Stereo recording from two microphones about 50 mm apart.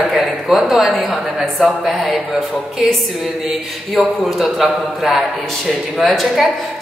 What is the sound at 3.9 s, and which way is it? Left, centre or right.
Speech, centre.